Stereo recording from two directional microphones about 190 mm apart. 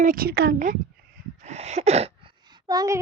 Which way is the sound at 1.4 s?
35° right (ahead or behind).